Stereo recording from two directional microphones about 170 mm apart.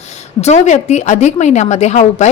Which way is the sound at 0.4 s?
45° left (ahead or behind).